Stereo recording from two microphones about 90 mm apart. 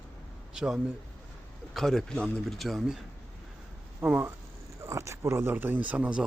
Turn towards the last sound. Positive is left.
turn(degrees=-15)  # may be behind; listen again after turning